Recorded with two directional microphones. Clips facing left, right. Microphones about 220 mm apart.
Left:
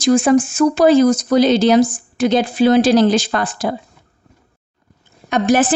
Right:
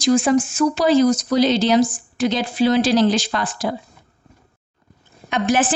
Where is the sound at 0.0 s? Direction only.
55° left (ahead or behind).